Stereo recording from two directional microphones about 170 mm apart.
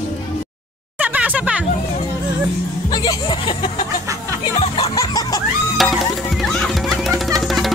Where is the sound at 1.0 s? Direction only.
10° right (ahead or behind).